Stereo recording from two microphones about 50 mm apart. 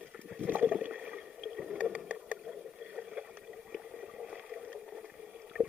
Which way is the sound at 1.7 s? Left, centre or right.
Right.